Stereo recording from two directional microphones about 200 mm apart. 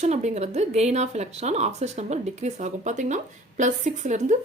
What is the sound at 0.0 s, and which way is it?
Speech, 35° right (ahead or behind).